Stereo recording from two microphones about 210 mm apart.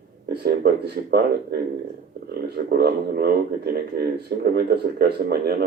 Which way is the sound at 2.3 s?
50° right (ahead or behind).